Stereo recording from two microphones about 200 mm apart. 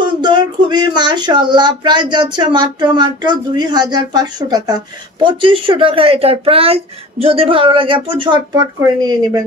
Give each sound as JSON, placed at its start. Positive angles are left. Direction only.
{"t": 0.0, "sound": "speech", "side_deg": -20}